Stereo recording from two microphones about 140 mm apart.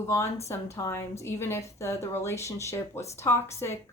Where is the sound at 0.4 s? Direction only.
20° left (ahead or behind).